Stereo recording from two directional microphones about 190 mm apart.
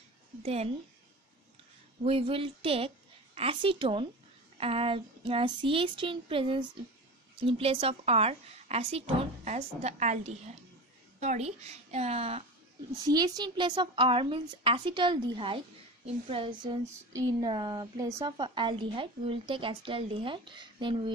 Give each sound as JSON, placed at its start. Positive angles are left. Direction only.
{"t": 0.4, "sound": "a woman's voice", "side_deg": -35}
{"t": 2.0, "sound": "a woman's voice", "side_deg": -30}
{"t": 13.0, "sound": "speech", "side_deg": -20}